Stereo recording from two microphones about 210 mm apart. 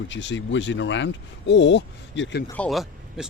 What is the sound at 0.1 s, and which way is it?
Speech, 60° left (ahead or behind).